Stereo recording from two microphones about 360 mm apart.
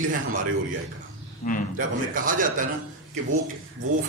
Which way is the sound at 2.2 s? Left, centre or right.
Right.